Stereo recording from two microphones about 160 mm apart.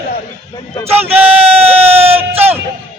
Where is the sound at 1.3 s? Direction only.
35° right (ahead or behind).